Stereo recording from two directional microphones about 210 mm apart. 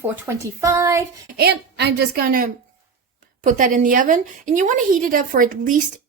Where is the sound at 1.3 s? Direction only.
50° right (ahead or behind).